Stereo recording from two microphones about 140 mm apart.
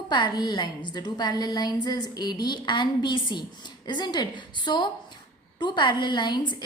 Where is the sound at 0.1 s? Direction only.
30° left (ahead or behind).